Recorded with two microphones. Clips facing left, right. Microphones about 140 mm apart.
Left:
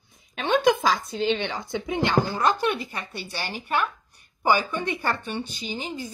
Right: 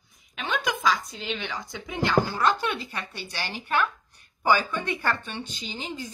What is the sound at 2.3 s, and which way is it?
Speech, 15° left (ahead or behind).